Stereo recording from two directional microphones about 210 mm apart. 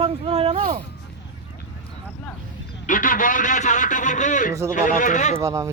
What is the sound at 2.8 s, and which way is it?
A man's voice, 40° left (ahead or behind).